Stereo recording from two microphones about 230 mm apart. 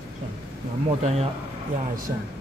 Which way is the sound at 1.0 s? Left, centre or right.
Right.